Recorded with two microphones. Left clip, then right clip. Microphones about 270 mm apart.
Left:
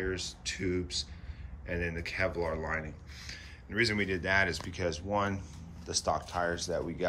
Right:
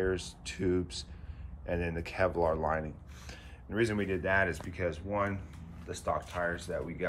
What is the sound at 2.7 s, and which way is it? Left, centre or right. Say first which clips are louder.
Speech: right 2 dB; right.